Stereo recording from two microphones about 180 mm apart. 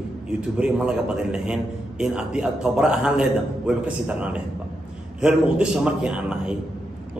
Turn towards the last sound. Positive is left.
turn(degrees=-5)  # may be behind; listen again after turning